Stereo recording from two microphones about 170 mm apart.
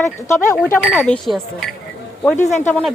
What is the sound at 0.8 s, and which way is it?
Speech, centre (ahead or behind).